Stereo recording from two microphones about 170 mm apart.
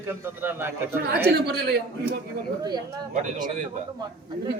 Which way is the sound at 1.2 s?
70° right (ahead or behind).